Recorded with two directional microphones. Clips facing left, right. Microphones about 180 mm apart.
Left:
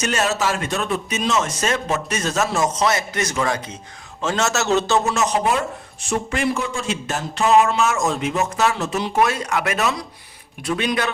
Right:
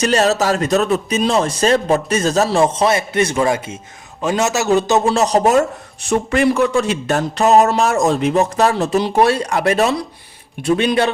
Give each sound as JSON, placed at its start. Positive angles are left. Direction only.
{"t": 0.0, "sound": "a man's voice", "side_deg": -35}
{"t": 4.9, "sound": "speech", "side_deg": -30}
{"t": 6.0, "sound": "speech", "side_deg": -65}
{"t": 7.3, "sound": "speech", "side_deg": -40}